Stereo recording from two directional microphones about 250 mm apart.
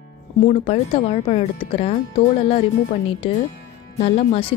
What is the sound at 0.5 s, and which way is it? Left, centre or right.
Speech, left.